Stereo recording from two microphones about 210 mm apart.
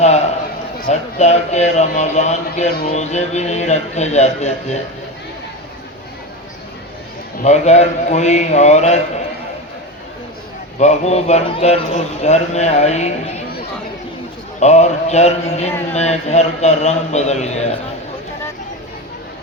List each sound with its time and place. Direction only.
0.9 s a man's voice: 30° left (ahead or behind)
7.4 s a man's voice: 35° left (ahead or behind)
10.8 s a man's voice: 30° left (ahead or behind)
14.6 s a man's voice: 30° left (ahead or behind)